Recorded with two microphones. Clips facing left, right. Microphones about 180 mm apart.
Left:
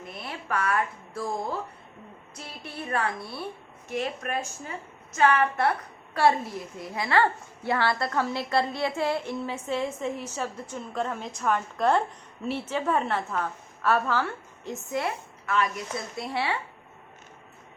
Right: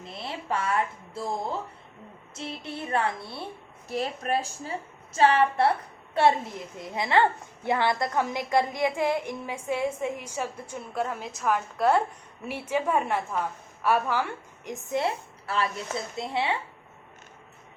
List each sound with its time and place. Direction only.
0.0 s speech: 25° right (ahead or behind)
3.8 s a woman's voice: 35° right (ahead or behind); by 15.0 s 15° right (ahead or behind)
15.0 s speech: 30° right (ahead or behind)